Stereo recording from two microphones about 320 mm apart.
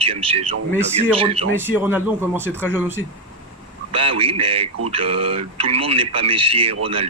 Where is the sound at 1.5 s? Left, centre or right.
Centre.